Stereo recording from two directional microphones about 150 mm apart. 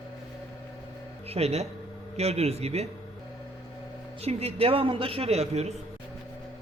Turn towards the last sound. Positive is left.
turn(degrees=-45)  # may be behind; listen again after turning